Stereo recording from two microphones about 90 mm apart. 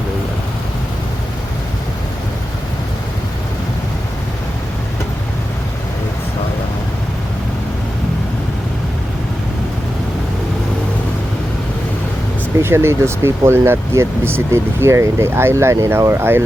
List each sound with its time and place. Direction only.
12.6 s speech: 30° right (ahead or behind)